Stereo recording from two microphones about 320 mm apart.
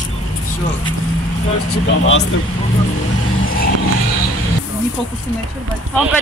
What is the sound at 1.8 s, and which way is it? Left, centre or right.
Speech, left.